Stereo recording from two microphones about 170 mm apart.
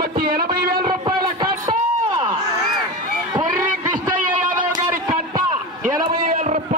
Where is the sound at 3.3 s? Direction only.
20° right (ahead or behind).